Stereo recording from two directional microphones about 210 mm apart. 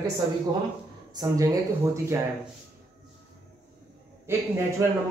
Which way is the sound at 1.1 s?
15° right (ahead or behind).